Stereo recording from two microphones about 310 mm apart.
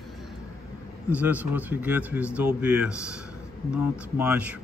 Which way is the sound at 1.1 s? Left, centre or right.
Centre.